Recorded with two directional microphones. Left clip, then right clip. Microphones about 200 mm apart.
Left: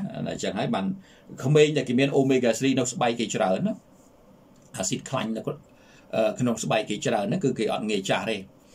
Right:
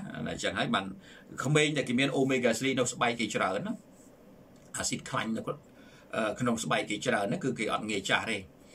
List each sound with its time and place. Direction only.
0.4 s speech: 10° left (ahead or behind)
4.7 s speech: 15° left (ahead or behind)